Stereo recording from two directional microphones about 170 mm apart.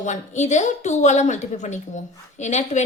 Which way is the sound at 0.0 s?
45° left (ahead or behind).